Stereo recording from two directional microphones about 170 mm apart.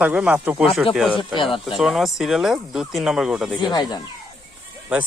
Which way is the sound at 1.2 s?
30° left (ahead or behind).